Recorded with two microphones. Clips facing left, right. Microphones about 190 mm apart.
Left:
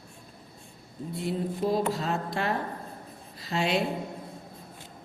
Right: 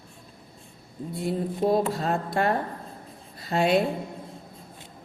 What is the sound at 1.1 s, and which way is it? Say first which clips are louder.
Speech: right 2 dB; 55° right (ahead or behind).